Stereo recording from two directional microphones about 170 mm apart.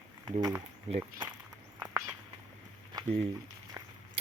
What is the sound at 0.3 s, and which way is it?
Speech, 25° right (ahead or behind).